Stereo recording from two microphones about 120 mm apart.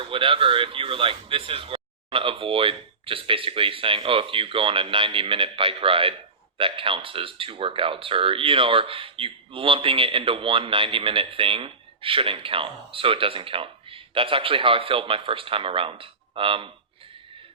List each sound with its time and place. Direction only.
0.0 s speech: 45° right (ahead or behind)